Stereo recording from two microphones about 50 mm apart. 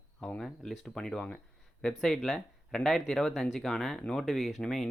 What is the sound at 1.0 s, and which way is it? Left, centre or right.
Speech, left.